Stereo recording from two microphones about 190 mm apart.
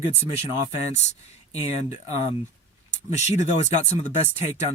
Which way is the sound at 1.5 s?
35° left (ahead or behind).